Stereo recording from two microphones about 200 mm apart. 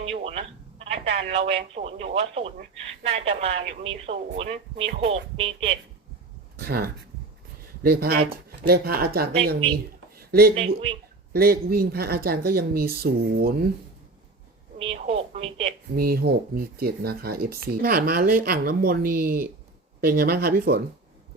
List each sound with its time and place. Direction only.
0.0 s telephone: 30° right (ahead or behind)
1.0 s speech: 30° right (ahead or behind)
6.7 s speech: 50° right (ahead or behind)
10.2 s a sound: 50° right (ahead or behind)
10.5 s speech: 30° right (ahead or behind)
11.3 s speech: 50° right (ahead or behind)
14.8 s speech: 30° right (ahead or behind)
16.0 s speech: 50° right (ahead or behind)